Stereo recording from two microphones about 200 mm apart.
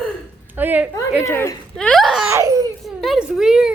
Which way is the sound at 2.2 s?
15° right (ahead or behind).